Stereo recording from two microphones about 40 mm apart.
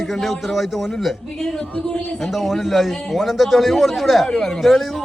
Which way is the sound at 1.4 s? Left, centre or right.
Centre.